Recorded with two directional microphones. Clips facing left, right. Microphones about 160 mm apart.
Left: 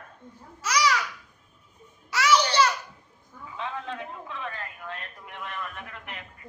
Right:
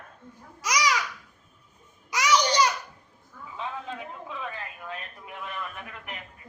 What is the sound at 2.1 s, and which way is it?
Babbling, 15° right (ahead or behind).